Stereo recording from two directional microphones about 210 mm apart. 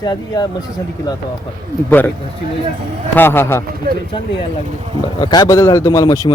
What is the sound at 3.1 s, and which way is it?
Speech, 10° left (ahead or behind).